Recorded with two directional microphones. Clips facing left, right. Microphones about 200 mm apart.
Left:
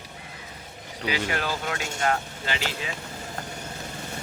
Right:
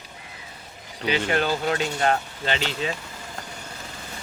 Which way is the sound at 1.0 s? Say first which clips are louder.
Right 5 dB; 25° right (ahead or behind).